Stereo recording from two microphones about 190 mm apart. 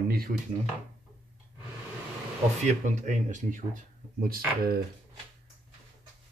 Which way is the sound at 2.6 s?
40° right (ahead or behind).